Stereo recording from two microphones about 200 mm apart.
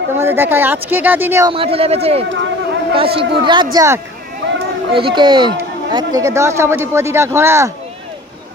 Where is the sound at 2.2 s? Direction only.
65° right (ahead or behind).